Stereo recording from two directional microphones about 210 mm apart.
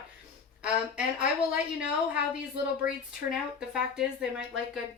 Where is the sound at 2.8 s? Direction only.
5° right (ahead or behind).